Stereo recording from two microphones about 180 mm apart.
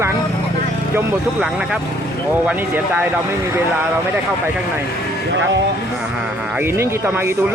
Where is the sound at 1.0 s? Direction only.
5° right (ahead or behind).